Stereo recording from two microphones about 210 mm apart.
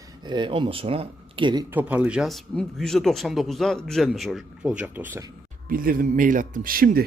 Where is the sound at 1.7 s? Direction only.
10° right (ahead or behind).